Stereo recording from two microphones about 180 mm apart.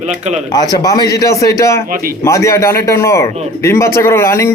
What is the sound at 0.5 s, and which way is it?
A man's voice, 20° left (ahead or behind).